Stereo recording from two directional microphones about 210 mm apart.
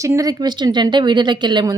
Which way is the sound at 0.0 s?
15° right (ahead or behind).